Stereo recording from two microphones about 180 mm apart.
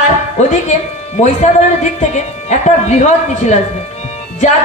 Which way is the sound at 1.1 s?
40° left (ahead or behind).